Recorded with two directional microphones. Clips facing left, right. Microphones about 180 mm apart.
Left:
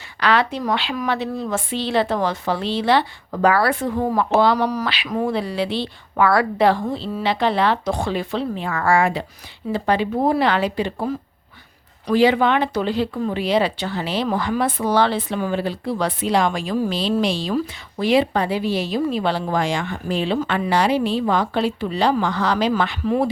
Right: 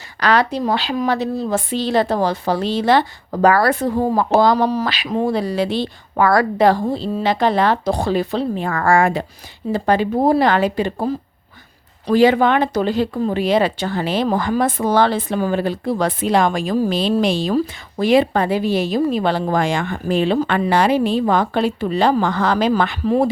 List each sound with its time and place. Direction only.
0.2 s a woman's voice: 40° right (ahead or behind)
4.5 s speech: 25° right (ahead or behind)
5.3 s a woman's voice: 40° right (ahead or behind)
12.1 s a woman's voice: 45° right (ahead or behind)
16.9 s a woman's voice: 50° right (ahead or behind)
23.0 s a woman's voice: 35° right (ahead or behind)